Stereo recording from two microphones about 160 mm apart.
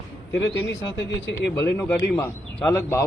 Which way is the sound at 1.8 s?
10° left (ahead or behind).